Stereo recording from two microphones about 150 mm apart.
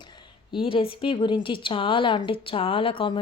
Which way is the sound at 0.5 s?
35° left (ahead or behind).